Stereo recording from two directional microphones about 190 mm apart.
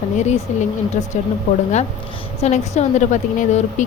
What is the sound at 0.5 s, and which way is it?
Speech, 40° left (ahead or behind).